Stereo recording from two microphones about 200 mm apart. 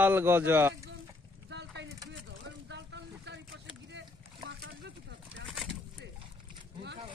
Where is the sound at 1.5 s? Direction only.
60° right (ahead or behind).